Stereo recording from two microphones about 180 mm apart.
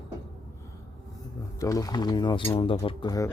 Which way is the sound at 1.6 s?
20° left (ahead or behind).